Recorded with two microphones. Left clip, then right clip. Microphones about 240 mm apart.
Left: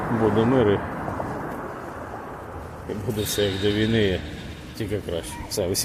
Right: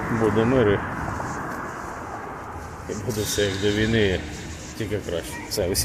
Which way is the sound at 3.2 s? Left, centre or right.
Centre.